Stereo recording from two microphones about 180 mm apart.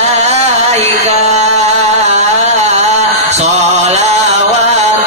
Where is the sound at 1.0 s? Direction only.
40° right (ahead or behind).